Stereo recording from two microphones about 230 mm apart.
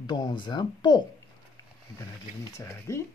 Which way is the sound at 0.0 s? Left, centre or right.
Centre.